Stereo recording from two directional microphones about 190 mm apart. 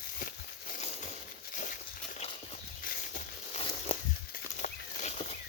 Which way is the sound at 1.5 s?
45° left (ahead or behind).